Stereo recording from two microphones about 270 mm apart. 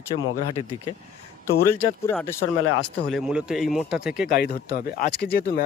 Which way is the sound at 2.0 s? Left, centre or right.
Centre.